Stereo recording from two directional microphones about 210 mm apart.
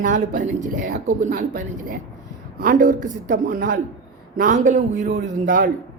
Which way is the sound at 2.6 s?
40° right (ahead or behind).